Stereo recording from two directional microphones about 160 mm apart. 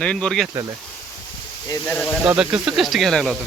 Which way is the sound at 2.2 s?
5° right (ahead or behind).